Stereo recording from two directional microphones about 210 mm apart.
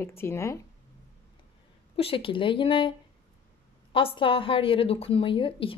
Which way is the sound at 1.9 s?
25° left (ahead or behind).